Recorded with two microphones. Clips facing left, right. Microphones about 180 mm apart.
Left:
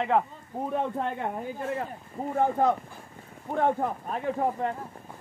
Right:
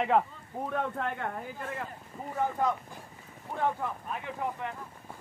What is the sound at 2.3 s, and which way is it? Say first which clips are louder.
Speech: left 5 dB; 50° left (ahead or behind).